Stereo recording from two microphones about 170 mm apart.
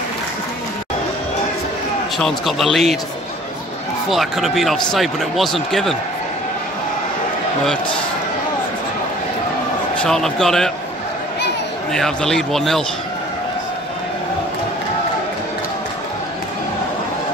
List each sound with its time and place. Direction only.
2.1 s speech: centre (ahead or behind)
4.1 s speech: centre (ahead or behind)
10.0 s speech: 5° left (ahead or behind)
11.9 s speech: 5° left (ahead or behind)